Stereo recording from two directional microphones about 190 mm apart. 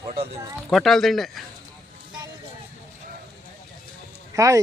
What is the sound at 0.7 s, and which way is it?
Speech, centre (ahead or behind).